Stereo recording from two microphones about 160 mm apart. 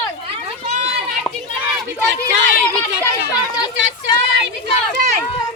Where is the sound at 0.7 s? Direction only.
45° right (ahead or behind).